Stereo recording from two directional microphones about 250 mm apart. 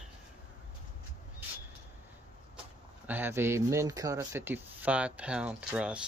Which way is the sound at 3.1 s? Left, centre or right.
Centre.